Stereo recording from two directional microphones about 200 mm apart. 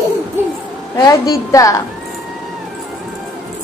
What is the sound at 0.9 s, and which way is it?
Speech, 20° left (ahead or behind).